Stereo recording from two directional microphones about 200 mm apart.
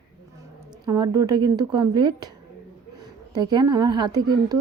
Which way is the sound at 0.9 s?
20° right (ahead or behind).